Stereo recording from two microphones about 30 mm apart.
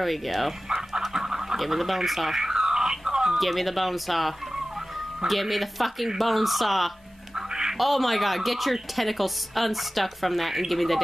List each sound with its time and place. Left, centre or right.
0.0 s a woman's voice: centre
1.1 s a sound: centre
1.6 s a woman's voice: centre
2.0 s bird: centre; by 3.3 s right
3.3 s a woman's voice: centre
5.3 s a woman's voice: centre
7.3 s music: right
7.7 s a woman's voice: centre